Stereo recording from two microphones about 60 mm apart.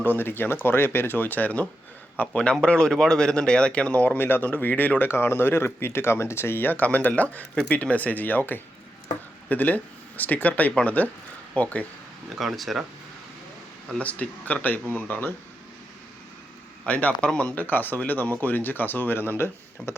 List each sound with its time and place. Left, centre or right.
0.0 s speech: left
4.2 s speech: left
12.3 s speech: centre
14.0 s speech: left
16.8 s speech: left